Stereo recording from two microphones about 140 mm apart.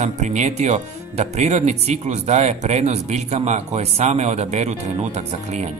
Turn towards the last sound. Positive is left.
turn(degrees=-50)  # may be behind; listen again after turning